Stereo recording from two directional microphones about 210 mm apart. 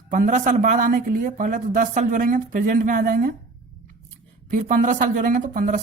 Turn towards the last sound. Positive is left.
turn(degrees=-40)  # may be behind; listen again after turning